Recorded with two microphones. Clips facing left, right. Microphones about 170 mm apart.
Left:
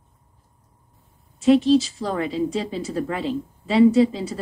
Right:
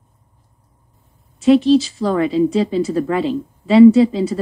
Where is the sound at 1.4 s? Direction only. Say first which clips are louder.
Right 4 dB; 90° right.